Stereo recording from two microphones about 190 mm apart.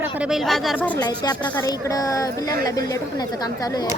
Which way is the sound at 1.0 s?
20° left (ahead or behind).